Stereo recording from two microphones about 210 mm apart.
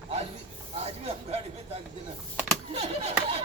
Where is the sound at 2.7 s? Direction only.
25° right (ahead or behind).